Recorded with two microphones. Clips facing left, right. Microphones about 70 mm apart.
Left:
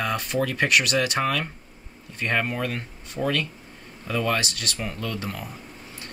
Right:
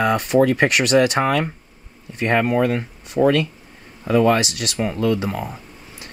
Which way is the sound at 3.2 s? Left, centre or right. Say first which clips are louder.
Right 11 dB; right.